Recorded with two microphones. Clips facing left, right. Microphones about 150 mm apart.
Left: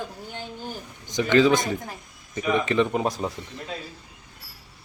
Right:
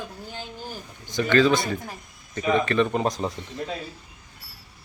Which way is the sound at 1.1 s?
15° left (ahead or behind).